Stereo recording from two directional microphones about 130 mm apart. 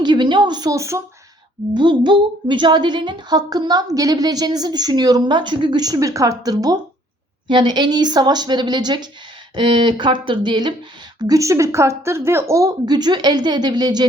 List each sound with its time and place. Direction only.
0.0 s a woman's voice: 35° right (ahead or behind)
1.7 s a woman's voice: 35° right (ahead or behind)